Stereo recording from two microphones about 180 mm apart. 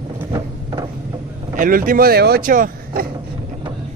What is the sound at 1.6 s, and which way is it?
Speech, 50° right (ahead or behind).